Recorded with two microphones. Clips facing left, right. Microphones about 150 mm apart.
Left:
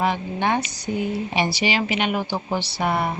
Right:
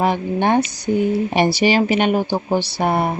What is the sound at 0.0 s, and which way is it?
Speech, 45° right (ahead or behind).